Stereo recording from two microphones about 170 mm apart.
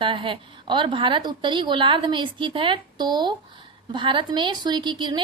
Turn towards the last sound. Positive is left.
turn(degrees=-25)  # may be behind; listen again after turning